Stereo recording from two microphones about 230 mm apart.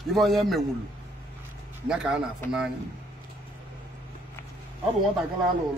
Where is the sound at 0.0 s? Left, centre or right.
Centre.